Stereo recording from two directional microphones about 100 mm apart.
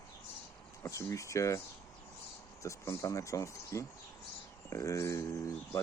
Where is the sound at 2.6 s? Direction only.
30° left (ahead or behind).